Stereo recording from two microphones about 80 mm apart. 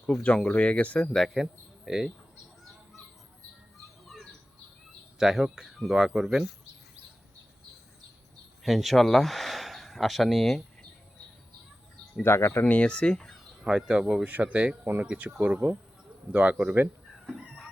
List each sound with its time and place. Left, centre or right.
0.0 s speech: centre
1.0 s speech: centre
4.0 s bird: centre
5.1 s speech: centre
8.6 s speech: centre
12.2 s speech: left
12.6 s speech: centre
13.1 s a sound: centre
13.7 s speech: centre
17.2 s fowl: centre